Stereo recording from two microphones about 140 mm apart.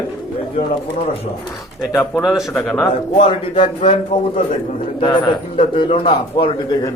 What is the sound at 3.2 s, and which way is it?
Speech, 55° left (ahead or behind).